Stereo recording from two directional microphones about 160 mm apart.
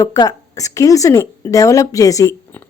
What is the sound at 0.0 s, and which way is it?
Speech, 25° left (ahead or behind).